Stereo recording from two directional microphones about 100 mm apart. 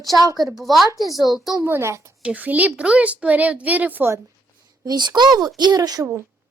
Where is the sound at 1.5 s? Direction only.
25° right (ahead or behind).